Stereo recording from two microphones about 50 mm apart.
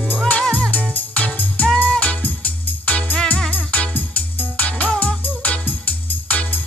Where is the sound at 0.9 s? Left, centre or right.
Left.